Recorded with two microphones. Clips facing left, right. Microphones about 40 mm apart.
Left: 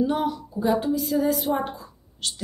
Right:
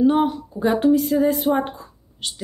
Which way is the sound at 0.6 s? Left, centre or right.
Right.